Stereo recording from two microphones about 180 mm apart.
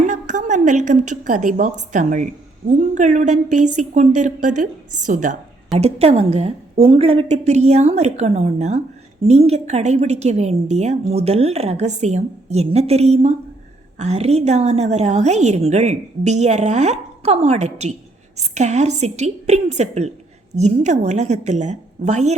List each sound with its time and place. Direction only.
0.0 s a woman's voice: 45° right (ahead or behind)